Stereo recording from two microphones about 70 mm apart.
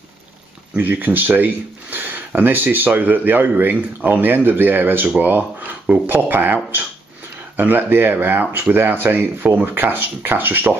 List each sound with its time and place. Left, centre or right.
0.7 s speech: right